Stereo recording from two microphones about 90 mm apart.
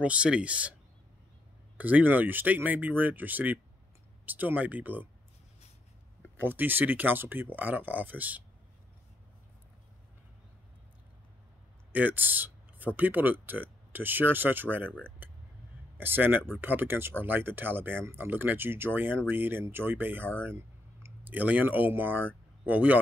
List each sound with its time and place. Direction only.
0.0 s speech: 15° right (ahead or behind)
1.8 s speech: 20° right (ahead or behind)
6.4 s speech: 20° right (ahead or behind)
11.9 s speech: 20° right (ahead or behind)
14.9 s speech: 15° left (ahead or behind)
16.0 s speech: 20° right (ahead or behind)